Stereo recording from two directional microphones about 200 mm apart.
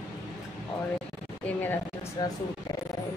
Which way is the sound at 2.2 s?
20° left (ahead or behind).